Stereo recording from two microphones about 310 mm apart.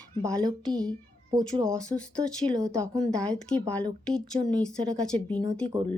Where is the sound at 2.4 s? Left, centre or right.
Centre.